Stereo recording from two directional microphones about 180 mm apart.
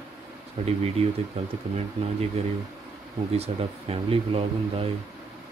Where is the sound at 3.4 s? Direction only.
35° right (ahead or behind).